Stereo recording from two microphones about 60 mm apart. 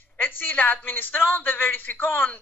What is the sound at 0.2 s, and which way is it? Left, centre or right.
A woman's voice, left.